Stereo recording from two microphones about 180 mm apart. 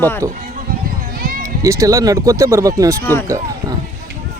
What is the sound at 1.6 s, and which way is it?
Speech, 20° right (ahead or behind).